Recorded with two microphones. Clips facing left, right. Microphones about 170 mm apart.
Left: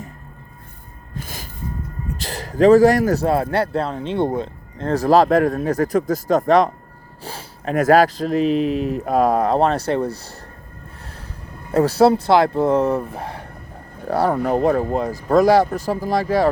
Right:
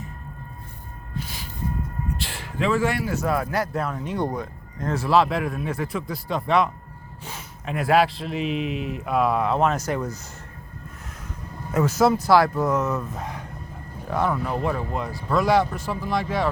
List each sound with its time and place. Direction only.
1.2 s music: 45° left (ahead or behind)
2.0 s a man's voice: 40° left (ahead or behind)
11.7 s a man's voice: 35° left (ahead or behind)
14.3 s a man's voice: 45° left (ahead or behind)